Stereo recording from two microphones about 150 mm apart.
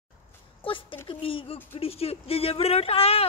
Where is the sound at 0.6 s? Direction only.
35° left (ahead or behind).